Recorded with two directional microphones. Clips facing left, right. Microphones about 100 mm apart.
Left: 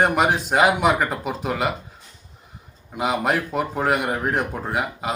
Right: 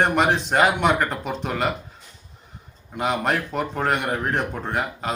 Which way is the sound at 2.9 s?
5° left (ahead or behind).